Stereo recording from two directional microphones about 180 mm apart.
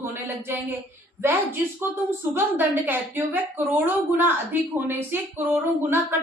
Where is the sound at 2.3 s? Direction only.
10° right (ahead or behind).